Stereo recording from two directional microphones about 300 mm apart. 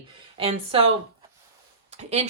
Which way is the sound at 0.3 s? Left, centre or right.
Centre.